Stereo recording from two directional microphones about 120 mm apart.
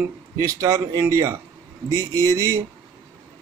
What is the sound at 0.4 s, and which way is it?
Speech, 25° right (ahead or behind).